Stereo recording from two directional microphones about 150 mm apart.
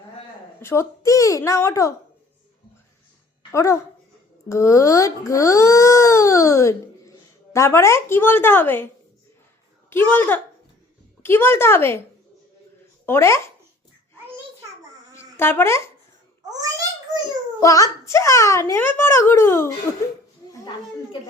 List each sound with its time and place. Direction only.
0.6 s speech: 15° left (ahead or behind)
3.5 s a woman's voice: 20° left (ahead or behind)
9.9 s a woman's voice: 15° left (ahead or behind)
13.1 s a woman's voice: 15° left (ahead or behind)
15.1 s speech: 15° left (ahead or behind)
16.5 s babbling: 25° right (ahead or behind)
17.6 s speech: 20° left (ahead or behind)